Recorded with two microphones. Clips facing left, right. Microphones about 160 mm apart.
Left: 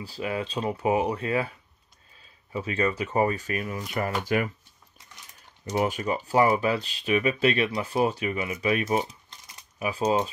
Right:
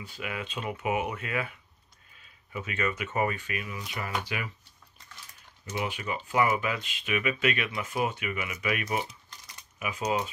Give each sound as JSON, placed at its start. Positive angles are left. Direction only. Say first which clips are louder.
{"t": 0.0, "sound": "speech", "louder": "left 7 dB", "side_deg": 30}
{"t": 5.7, "sound": "speech", "louder": "left 7 dB", "side_deg": 45}